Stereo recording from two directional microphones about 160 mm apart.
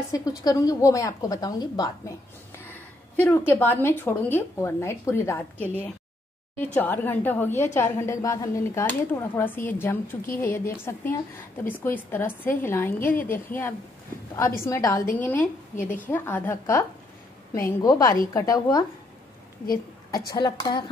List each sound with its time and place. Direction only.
0.4 s a woman's voice: 25° left (ahead or behind)
3.2 s a woman's voice: 15° left (ahead or behind)
15.7 s a woman's voice: 55° left (ahead or behind)
16.1 s a woman's voice: 15° left (ahead or behind)
20.1 s a woman's voice: 25° left (ahead or behind)